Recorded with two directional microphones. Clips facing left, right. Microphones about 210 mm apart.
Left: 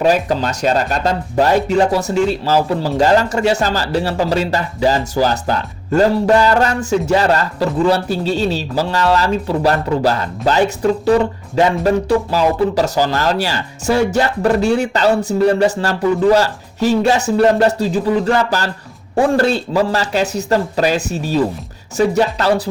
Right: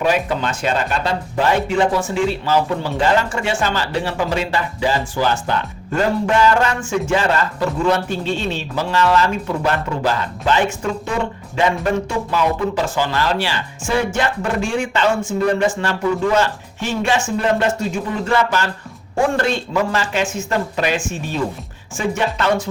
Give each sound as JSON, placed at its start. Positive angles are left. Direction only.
{"t": 0.0, "sound": "speech", "side_deg": 35}